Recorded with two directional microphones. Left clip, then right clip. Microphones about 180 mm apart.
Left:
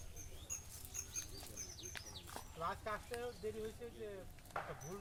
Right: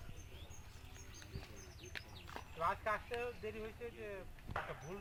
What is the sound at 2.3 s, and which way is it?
Speech, 30° right (ahead or behind).